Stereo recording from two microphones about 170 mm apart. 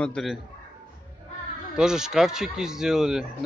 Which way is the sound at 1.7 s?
5° right (ahead or behind).